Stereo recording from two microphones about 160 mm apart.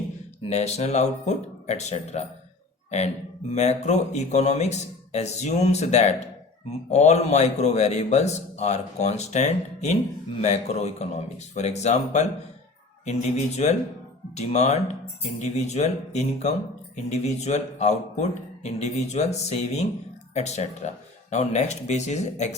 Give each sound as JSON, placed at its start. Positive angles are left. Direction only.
{"t": 0.4, "sound": "a man's voice", "side_deg": 40}
{"t": 3.5, "sound": "a man's voice", "side_deg": 45}